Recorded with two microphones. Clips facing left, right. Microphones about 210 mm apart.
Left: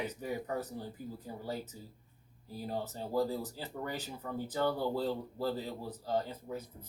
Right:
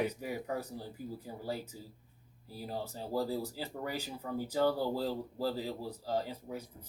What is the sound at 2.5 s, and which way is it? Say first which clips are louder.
Speech: left 2 dB; 10° right (ahead or behind).